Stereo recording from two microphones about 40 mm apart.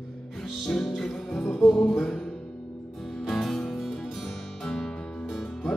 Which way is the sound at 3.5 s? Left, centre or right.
Centre.